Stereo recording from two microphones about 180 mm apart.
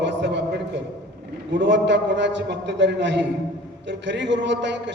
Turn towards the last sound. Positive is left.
turn(degrees=-80)